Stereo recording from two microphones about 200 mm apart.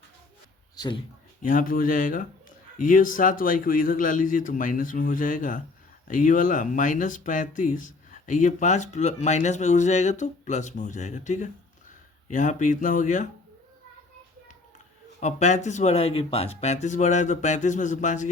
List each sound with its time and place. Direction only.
1.4 s speech: 45° left (ahead or behind)
15.2 s speech: 35° left (ahead or behind)